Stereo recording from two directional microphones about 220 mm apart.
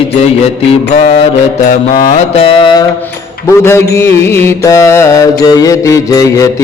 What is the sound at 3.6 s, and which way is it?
Mantra, 10° left (ahead or behind).